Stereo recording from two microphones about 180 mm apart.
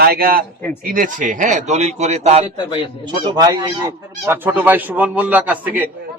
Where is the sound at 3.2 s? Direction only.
25° right (ahead or behind).